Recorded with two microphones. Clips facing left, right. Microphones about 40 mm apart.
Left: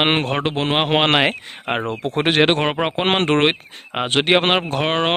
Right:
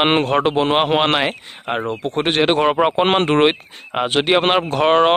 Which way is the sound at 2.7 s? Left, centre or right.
Centre.